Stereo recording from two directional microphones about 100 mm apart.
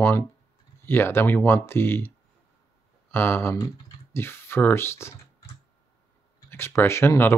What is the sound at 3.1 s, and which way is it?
Speech, 20° left (ahead or behind).